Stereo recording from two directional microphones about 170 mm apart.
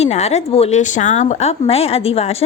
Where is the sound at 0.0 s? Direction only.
40° left (ahead or behind).